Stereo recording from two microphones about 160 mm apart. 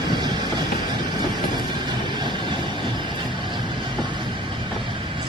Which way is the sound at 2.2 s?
30° right (ahead or behind).